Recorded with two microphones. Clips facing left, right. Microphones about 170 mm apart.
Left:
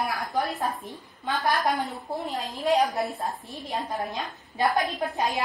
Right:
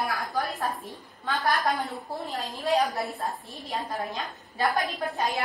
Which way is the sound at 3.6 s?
20° left (ahead or behind).